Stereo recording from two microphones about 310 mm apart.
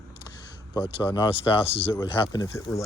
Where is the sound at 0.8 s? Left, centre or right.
Centre.